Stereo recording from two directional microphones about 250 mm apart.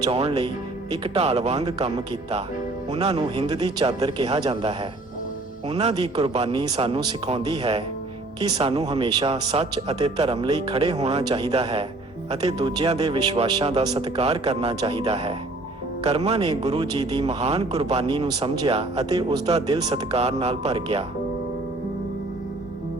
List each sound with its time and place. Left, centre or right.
0.0 s a man's voice: right